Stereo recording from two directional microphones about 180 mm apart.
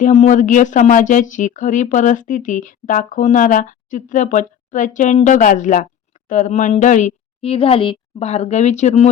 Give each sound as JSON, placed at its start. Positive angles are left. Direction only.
{"t": 0.0, "sound": "a woman's voice", "side_deg": 45}